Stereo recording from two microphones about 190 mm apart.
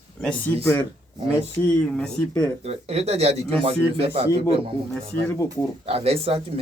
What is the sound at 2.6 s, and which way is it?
Speech, 30° right (ahead or behind).